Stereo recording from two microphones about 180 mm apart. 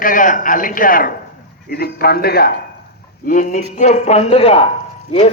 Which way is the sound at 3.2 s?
45° left (ahead or behind).